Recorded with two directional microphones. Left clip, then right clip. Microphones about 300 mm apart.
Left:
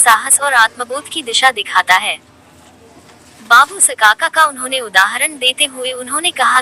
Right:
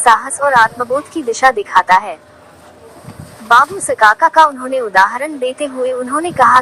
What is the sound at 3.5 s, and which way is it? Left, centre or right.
A woman's voice, centre.